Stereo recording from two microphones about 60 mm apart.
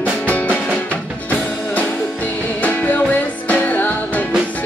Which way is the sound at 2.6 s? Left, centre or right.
Left.